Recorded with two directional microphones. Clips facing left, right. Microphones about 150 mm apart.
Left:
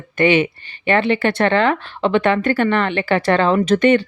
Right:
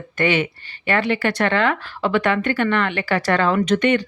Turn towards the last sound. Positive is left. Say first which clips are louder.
# left 4 dB
turn(degrees=35)  # may be behind; listen again after turning